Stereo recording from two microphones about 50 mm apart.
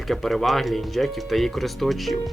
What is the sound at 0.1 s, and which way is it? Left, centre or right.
Speech, centre.